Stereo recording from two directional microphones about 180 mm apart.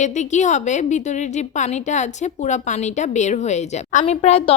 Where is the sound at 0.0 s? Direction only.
40° left (ahead or behind).